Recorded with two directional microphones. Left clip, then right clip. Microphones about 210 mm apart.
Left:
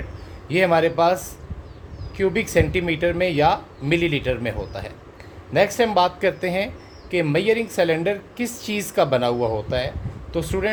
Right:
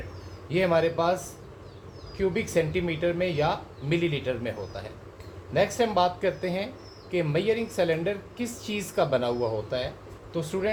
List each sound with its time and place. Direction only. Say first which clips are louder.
0.4 s a woman's voice: left 6 dB; 50° left (ahead or behind)